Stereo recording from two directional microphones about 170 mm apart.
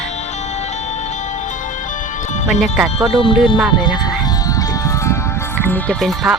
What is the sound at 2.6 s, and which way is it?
Speech, 5° right (ahead or behind).